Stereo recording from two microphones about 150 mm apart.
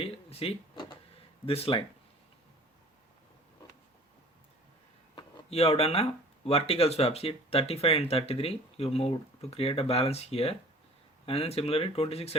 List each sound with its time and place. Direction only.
0.0 s a sound: 40° left (ahead or behind)
1.5 s speech: 40° left (ahead or behind)
5.1 s speech: 40° left (ahead or behind)